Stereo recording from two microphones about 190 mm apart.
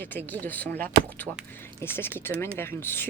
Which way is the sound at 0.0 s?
10° left (ahead or behind).